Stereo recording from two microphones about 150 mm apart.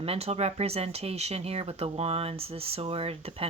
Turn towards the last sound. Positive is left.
turn(degrees=-40)  # may be behind; listen again after turning